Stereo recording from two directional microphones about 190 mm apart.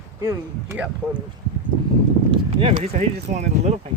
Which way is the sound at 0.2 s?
15° right (ahead or behind).